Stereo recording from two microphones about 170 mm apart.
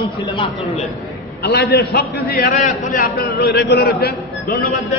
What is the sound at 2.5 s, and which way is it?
A man's voice, 50° left (ahead or behind).